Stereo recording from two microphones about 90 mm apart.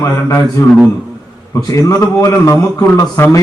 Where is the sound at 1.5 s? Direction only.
40° left (ahead or behind).